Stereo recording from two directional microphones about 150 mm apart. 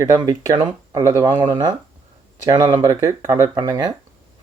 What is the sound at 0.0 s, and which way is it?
Speech, 25° right (ahead or behind).